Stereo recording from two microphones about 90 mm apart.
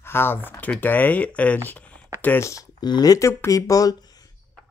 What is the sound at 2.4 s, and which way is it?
Speech, 35° left (ahead or behind).